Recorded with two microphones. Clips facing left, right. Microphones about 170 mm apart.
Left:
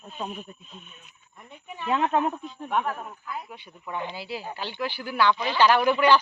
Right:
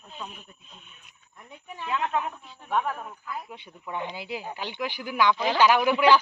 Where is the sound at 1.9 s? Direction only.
35° left (ahead or behind).